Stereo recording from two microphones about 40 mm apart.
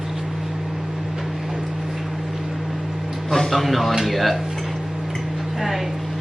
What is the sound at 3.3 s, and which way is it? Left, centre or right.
Speech, centre.